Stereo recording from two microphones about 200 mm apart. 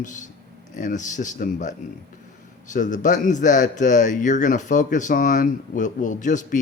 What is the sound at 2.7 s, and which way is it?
A man's voice, 40° left (ahead or behind).